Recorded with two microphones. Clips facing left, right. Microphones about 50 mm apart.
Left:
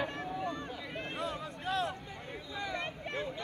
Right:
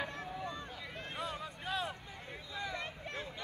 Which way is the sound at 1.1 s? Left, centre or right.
Centre.